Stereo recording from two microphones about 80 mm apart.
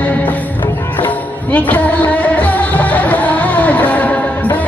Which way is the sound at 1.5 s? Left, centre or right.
Centre.